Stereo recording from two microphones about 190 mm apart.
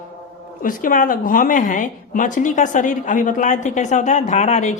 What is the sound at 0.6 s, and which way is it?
A woman's voice, 45° left (ahead or behind).